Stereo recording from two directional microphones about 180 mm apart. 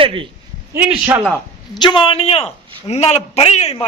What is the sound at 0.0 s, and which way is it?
Speech, 30° right (ahead or behind).